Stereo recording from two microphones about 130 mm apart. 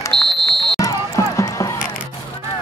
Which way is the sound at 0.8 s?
25° left (ahead or behind).